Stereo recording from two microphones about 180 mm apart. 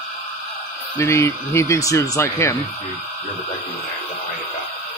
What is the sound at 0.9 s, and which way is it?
Speech, 15° left (ahead or behind).